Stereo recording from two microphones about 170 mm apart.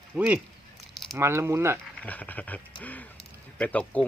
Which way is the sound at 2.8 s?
10° left (ahead or behind).